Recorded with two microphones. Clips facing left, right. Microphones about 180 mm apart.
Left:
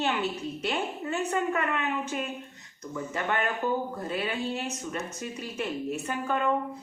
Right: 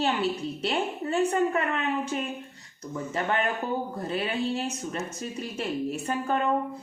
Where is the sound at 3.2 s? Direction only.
30° right (ahead or behind).